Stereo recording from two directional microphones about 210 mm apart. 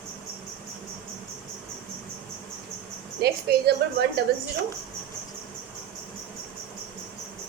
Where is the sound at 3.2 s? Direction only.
50° right (ahead or behind).